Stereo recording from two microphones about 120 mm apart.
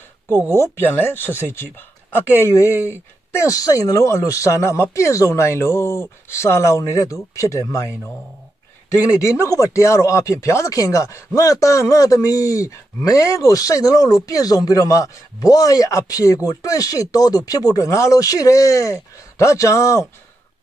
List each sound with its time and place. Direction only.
0.6 s speech: 20° left (ahead or behind)
9.4 s speech: 25° left (ahead or behind)